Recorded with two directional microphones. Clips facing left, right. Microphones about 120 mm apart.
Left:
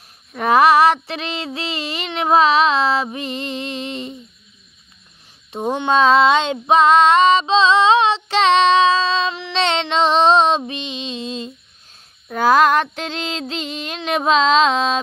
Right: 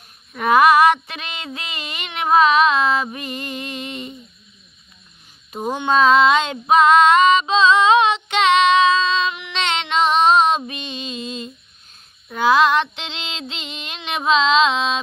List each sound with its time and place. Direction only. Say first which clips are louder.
0.3 s child singing: even; 30° left (ahead or behind)
5.6 s female singing: left 1 dB; 30° left (ahead or behind)
12.3 s female singing: left 2 dB; 45° left (ahead or behind)
13.5 s child singing: left 7 dB; 40° left (ahead or behind)